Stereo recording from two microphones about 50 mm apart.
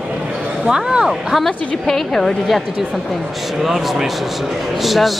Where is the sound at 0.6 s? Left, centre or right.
Centre.